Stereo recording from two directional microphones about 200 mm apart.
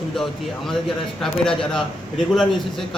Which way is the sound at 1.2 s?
Centre (ahead or behind).